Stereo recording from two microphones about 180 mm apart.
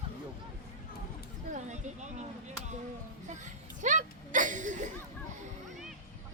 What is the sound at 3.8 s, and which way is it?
Speech, 45° right (ahead or behind).